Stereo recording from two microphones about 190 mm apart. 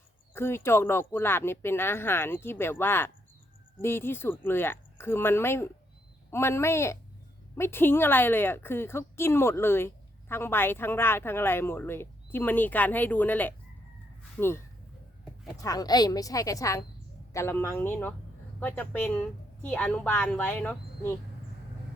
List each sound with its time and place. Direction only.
0.3 s a woman's voice: 10° left (ahead or behind)
15.6 s a woman's voice: 20° left (ahead or behind)